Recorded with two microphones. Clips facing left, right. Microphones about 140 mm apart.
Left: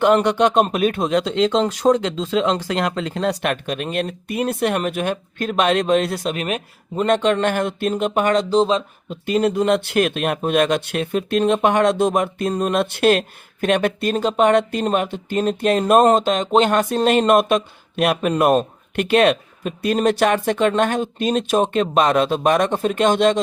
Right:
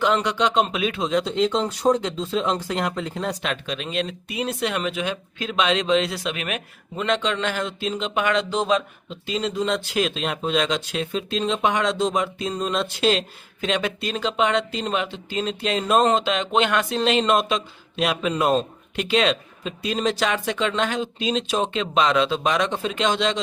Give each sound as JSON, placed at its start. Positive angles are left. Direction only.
{"t": 0.0, "sound": "speech", "side_deg": 55}
{"t": 1.2, "sound": "speech", "side_deg": 90}
{"t": 9.0, "sound": "speech", "side_deg": 55}